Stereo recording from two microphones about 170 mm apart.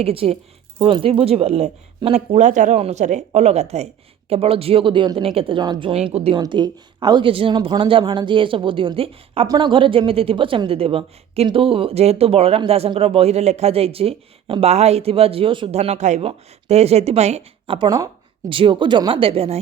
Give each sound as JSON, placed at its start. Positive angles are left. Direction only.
{"t": 0.0, "sound": "a woman's voice", "side_deg": -35}